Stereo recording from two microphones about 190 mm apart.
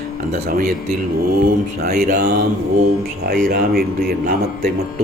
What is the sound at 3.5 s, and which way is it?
Speech, 55° right (ahead or behind).